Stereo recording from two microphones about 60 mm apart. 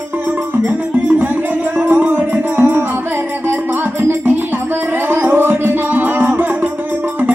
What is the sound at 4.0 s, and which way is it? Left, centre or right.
Music, right.